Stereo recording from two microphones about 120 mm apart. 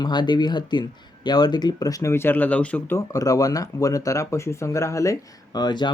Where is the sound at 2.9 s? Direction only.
30° left (ahead or behind).